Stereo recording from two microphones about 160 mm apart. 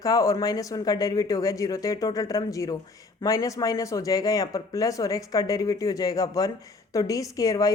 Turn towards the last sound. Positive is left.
turn(degrees=20)  # may be behind; listen again after turning